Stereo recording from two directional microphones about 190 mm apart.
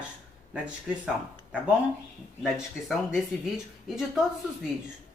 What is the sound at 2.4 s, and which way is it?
Speech, centre (ahead or behind).